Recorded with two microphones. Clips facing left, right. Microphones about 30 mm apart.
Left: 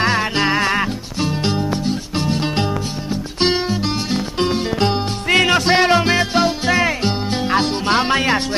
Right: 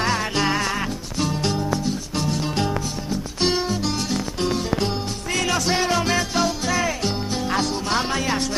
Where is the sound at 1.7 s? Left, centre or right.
Left.